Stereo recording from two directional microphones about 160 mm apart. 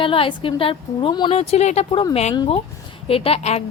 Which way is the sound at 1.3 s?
40° left (ahead or behind).